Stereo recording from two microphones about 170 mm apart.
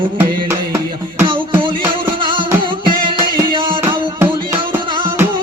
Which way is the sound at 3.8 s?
15° right (ahead or behind).